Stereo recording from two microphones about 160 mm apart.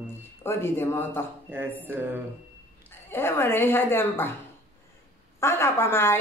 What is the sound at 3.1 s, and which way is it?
A woman's voice, 15° left (ahead or behind).